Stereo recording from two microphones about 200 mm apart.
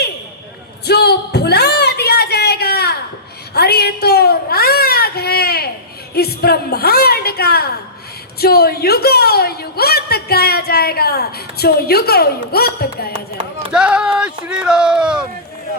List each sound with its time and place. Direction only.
0.9 s a sound: 55° left (ahead or behind)
6.1 s a woman's voice: 50° left (ahead or behind)
13.7 s speech: 5° right (ahead or behind)